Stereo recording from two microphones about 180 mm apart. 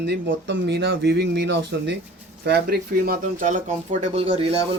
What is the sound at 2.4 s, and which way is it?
Speech, 60° right (ahead or behind).